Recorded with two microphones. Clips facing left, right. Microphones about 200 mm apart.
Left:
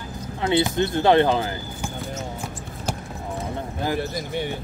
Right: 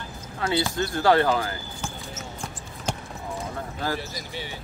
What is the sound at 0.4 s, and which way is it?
Speech, 20° left (ahead or behind).